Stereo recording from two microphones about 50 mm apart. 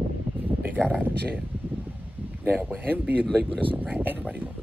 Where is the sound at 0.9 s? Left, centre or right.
Right.